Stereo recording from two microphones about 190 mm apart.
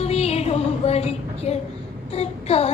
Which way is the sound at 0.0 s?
35° left (ahead or behind).